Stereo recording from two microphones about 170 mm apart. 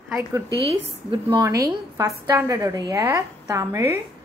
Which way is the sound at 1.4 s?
20° right (ahead or behind).